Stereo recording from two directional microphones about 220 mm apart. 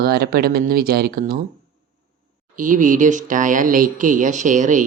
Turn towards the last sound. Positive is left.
turn(degrees=-35)  # may be behind; listen again after turning